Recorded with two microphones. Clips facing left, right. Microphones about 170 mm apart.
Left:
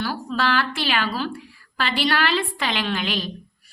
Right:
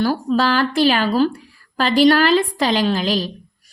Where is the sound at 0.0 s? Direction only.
40° right (ahead or behind).